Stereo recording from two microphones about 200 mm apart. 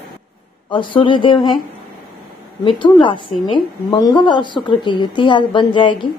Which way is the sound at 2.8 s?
25° left (ahead or behind).